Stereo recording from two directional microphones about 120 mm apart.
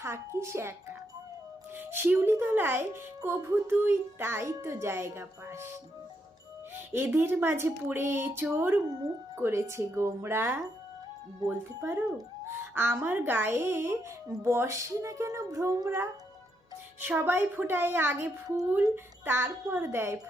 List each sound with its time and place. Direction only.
0.0 s speech: 25° right (ahead or behind)
6.7 s a woman's voice: 20° right (ahead or behind)